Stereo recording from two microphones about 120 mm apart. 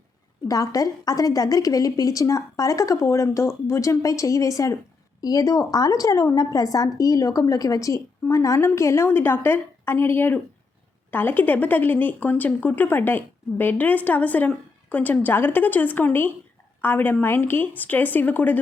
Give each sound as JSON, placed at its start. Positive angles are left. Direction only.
{"t": 0.4, "sound": "a woman's voice", "side_deg": 30}